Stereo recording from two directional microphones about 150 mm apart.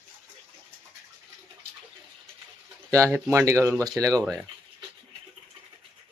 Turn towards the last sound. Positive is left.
turn(degrees=-25)  # may be behind; listen again after turning